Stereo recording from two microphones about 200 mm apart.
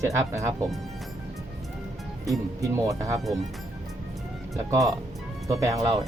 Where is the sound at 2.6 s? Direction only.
15° right (ahead or behind).